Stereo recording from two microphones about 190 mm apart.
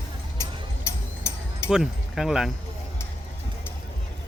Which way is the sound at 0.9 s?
15° left (ahead or behind).